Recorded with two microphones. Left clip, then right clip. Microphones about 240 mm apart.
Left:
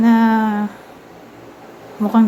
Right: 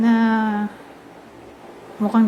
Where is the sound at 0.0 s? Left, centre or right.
Centre.